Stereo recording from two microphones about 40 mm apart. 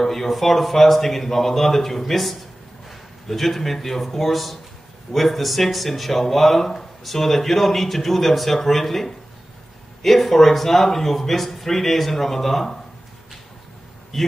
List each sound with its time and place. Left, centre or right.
0.0 s a man's voice: centre
14.1 s a man's voice: centre